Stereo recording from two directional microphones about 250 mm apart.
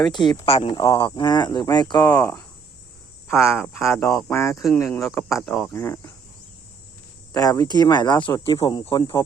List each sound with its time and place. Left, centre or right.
0.1 s speech: centre
3.5 s speech: centre
3.8 s speech: centre
7.3 s speech: centre